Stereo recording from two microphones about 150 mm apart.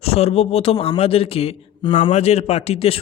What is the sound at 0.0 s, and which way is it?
A man's voice, 40° left (ahead or behind).